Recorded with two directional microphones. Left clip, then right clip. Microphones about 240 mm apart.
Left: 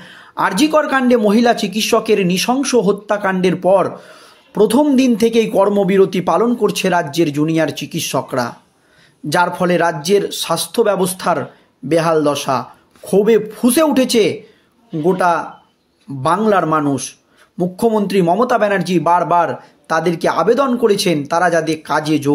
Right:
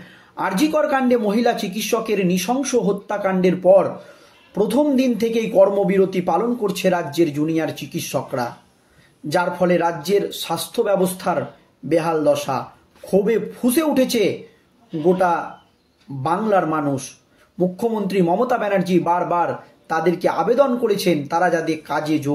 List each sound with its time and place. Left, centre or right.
0.1 s speech: left